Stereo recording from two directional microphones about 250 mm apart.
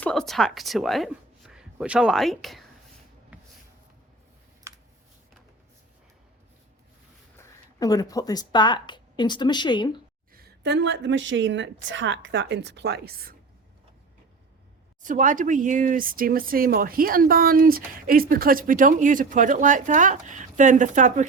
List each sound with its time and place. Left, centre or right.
0.0 s speech: centre
7.3 s speech: centre
10.3 s a woman's voice: right
15.0 s speech: right